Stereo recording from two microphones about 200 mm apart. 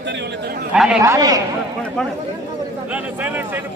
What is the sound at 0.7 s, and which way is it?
Speech, 5° right (ahead or behind).